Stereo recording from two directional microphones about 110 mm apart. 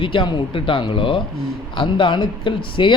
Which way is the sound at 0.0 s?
50° left (ahead or behind).